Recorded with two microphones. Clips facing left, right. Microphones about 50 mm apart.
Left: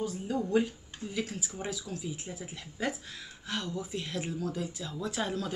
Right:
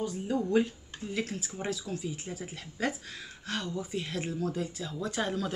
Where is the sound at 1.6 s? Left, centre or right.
Centre.